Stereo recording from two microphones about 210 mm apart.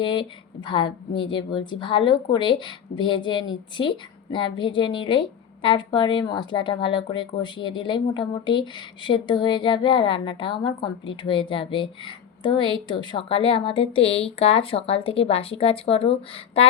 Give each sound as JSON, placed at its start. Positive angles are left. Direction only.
{"t": 0.0, "sound": "a woman's voice", "side_deg": 25}